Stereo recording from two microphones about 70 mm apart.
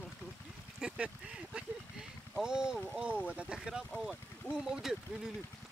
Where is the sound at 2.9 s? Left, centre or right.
Centre.